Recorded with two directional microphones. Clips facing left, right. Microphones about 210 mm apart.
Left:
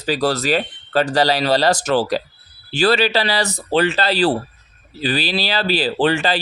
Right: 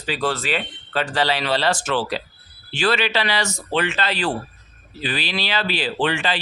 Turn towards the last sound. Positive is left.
turn(degrees=40)  # may be behind; listen again after turning